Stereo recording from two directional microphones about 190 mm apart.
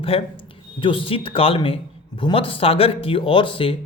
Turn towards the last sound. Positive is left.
turn(degrees=30)  # may be behind; listen again after turning